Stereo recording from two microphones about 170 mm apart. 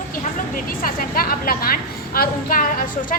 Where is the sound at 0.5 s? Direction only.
55° left (ahead or behind).